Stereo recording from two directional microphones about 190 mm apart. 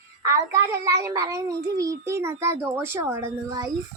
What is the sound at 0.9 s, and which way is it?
A child's voice, 15° right (ahead or behind).